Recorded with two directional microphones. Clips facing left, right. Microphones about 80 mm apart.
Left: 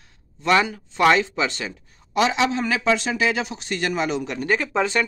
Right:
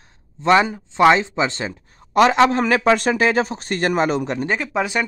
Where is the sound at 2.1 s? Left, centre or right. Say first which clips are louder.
Right 6 dB; right.